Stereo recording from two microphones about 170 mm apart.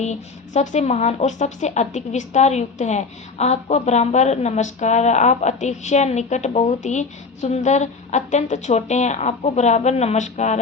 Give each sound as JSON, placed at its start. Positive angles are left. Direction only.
{"t": 0.0, "sound": "a woman's voice", "side_deg": 45}